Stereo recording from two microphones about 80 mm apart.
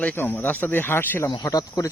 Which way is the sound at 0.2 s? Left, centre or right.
Left.